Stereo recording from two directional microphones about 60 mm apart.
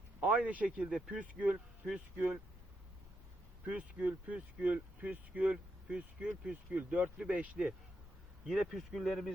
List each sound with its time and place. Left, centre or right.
0.2 s speech: centre
3.7 s speech: right
8.4 s speech: centre